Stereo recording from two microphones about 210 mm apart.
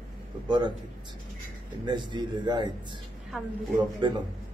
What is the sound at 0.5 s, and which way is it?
Speech, 20° right (ahead or behind).